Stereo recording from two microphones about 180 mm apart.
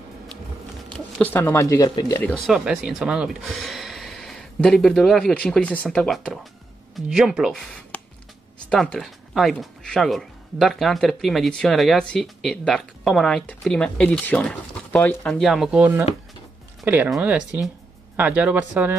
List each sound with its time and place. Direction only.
0.8 s speech: 5° left (ahead or behind); by 2.1 s 25° left (ahead or behind)
2.4 s speech: 5° right (ahead or behind)